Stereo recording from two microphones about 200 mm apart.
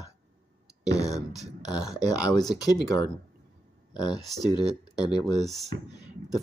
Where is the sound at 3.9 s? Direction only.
20° left (ahead or behind).